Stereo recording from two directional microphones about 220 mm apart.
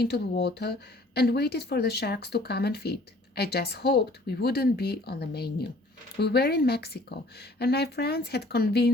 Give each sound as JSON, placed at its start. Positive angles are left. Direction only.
{"t": 0.0, "sound": "speech", "side_deg": 50}